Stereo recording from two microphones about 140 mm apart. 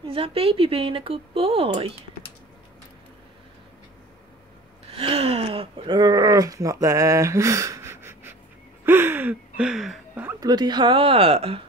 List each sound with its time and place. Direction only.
0.0 s speech: 45° right (ahead or behind)
4.9 s speech: 40° right (ahead or behind); by 8.4 s 15° right (ahead or behind)
8.8 s gasp: 15° right (ahead or behind)
10.4 s speech: 30° right (ahead or behind); by 11.6 s 45° right (ahead or behind)